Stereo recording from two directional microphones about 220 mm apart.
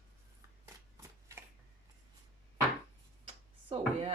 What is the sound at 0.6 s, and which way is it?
Shuffling cards, 10° right (ahead or behind).